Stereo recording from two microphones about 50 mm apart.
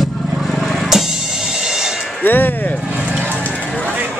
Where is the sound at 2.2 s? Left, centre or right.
Left.